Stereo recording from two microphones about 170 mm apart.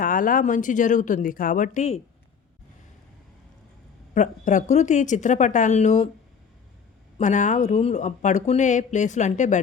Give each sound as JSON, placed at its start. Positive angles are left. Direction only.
{"t": 0.0, "sound": "speech", "side_deg": 55}
{"t": 4.1, "sound": "speech", "side_deg": 45}
{"t": 7.2, "sound": "speech", "side_deg": 45}